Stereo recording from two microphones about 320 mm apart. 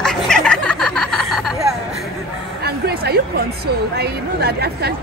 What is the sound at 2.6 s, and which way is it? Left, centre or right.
Music, right.